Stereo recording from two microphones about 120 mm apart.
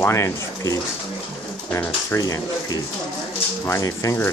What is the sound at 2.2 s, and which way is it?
Speech, 30° left (ahead or behind).